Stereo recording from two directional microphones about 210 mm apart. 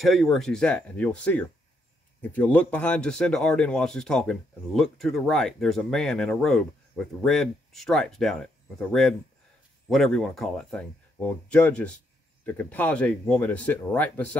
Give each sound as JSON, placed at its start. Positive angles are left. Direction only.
{"t": 0.0, "sound": "speech", "side_deg": 0}
{"t": 9.8, "sound": "speech", "side_deg": 0}